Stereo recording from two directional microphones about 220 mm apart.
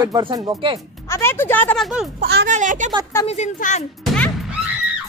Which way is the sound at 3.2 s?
30° left (ahead or behind).